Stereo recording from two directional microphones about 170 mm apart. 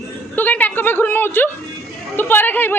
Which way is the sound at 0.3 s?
10° left (ahead or behind).